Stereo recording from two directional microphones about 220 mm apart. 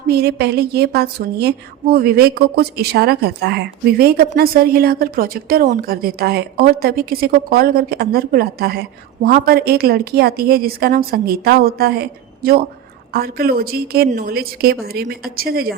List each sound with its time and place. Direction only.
0.1 s a woman's voice: 45° right (ahead or behind)